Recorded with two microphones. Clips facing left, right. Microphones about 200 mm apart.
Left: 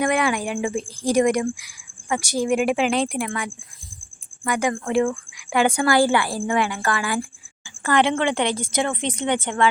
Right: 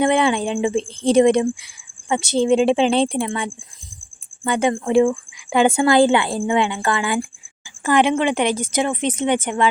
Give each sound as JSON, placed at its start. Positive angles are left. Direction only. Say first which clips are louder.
{"t": 0.0, "sound": "speech", "louder": "right 4 dB", "side_deg": -25}